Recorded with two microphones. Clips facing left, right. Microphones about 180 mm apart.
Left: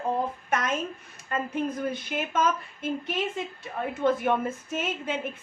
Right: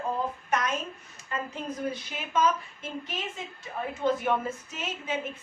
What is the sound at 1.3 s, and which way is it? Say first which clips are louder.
A woman's voice: left 5 dB; 55° left (ahead or behind).